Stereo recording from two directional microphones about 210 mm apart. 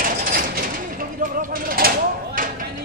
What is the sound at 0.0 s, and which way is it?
Mechanisms, 40° right (ahead or behind).